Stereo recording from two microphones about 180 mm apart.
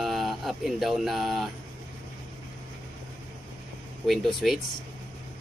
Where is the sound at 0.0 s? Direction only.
Centre (ahead or behind).